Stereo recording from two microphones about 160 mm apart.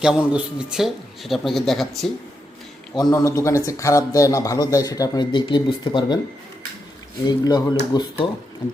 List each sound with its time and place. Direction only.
0.0 s speech: 5° right (ahead or behind)
2.9 s speech: 25° left (ahead or behind)
7.3 s speech: 25° left (ahead or behind)
8.2 s speech: 35° left (ahead or behind)